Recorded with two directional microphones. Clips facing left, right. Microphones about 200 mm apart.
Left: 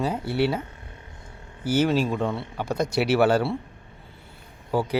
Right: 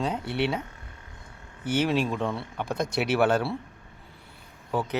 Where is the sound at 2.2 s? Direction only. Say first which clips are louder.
Left 3 dB; 15° left (ahead or behind).